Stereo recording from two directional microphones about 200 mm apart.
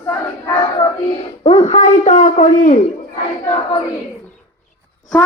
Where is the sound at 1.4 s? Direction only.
30° left (ahead or behind).